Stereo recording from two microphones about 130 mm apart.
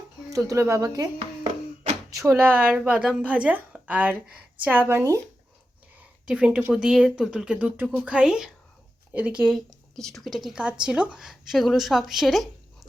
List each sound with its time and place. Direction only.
0.3 s a woman's voice: 25° right (ahead or behind)
6.2 s a woman's voice: 10° right (ahead or behind)
9.6 s speech: 5° left (ahead or behind)